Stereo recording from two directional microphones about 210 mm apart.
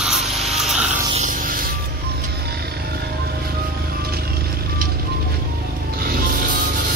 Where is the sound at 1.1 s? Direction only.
40° right (ahead or behind).